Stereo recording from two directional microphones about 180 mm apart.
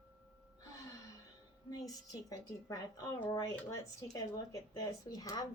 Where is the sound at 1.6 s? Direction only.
20° left (ahead or behind).